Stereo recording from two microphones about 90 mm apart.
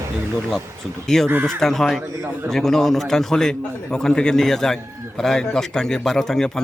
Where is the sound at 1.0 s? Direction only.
5° left (ahead or behind).